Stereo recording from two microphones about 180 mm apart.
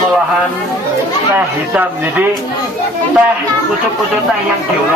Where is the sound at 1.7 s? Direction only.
10° right (ahead or behind).